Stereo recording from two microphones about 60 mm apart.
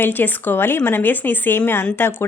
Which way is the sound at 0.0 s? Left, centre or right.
Left.